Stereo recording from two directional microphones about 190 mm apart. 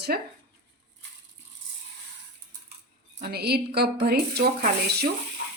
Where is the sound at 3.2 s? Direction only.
55° right (ahead or behind).